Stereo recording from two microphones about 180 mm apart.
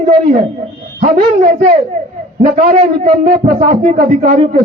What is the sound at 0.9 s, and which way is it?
A man's voice, 45° right (ahead or behind).